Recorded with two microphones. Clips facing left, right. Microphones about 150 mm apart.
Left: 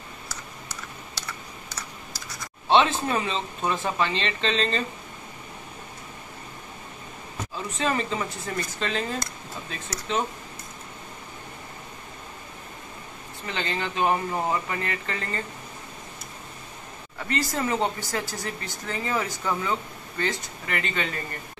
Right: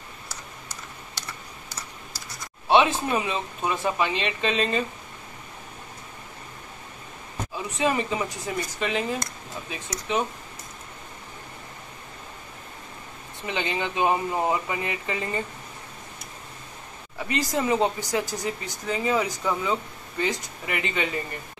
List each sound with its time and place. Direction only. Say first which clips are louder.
2.7 s speech: right 1 dB; 10° right (ahead or behind)
7.5 s speech: right 2 dB; 10° right (ahead or behind)
13.5 s speech: right 2 dB; 15° right (ahead or behind)
17.2 s speech: right 1 dB; 15° right (ahead or behind)